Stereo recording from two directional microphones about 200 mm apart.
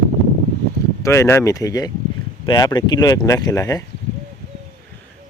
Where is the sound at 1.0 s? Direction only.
15° left (ahead or behind).